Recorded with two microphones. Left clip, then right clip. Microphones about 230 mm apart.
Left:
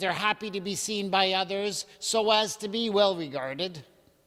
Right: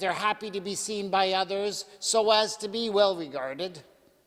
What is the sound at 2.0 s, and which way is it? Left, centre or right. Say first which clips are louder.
Speech: right 1 dB; left.